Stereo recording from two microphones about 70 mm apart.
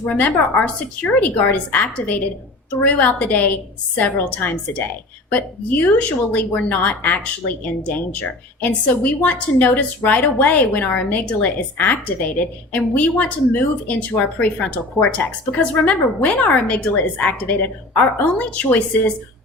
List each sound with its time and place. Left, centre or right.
0.1 s a woman's voice: left